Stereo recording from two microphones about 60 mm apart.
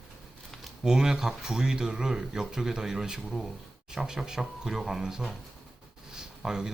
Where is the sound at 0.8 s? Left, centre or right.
Centre.